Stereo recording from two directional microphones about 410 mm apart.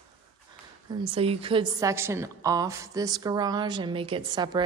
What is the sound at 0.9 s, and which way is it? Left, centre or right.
A woman's voice, centre.